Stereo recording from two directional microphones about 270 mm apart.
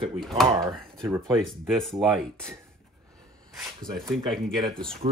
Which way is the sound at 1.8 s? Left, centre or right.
Centre.